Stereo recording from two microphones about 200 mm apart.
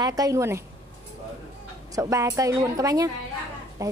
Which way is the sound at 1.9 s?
15° right (ahead or behind).